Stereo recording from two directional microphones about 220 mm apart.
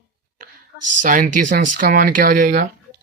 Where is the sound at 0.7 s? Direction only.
90° right.